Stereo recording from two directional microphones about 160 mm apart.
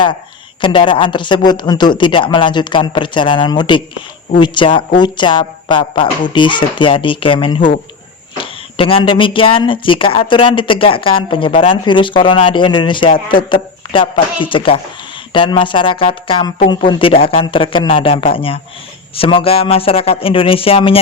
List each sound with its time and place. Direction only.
0.6 s a woman's voice: 30° left (ahead or behind)